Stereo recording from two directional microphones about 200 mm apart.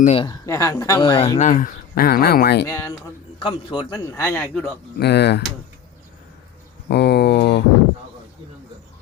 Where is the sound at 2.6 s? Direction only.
15° left (ahead or behind).